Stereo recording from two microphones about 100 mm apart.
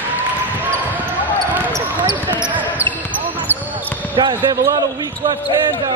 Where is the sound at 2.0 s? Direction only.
50° right (ahead or behind).